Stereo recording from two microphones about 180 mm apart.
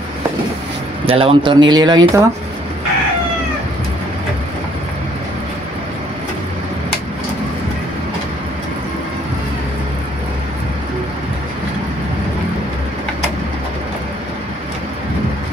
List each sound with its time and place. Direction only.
1.0 s speech: 30° right (ahead or behind)